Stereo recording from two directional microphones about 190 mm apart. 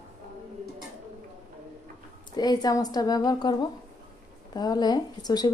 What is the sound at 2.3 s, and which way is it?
Speech, 20° left (ahead or behind).